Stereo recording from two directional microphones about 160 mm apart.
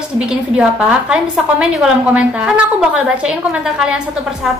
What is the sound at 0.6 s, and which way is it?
A woman's voice, 5° right (ahead or behind).